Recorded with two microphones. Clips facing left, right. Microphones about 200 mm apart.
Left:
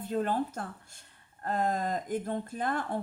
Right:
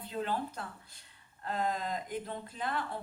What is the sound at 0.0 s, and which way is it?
Speech, 50° left (ahead or behind).